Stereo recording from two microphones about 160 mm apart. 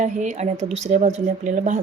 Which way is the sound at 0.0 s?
50° right (ahead or behind).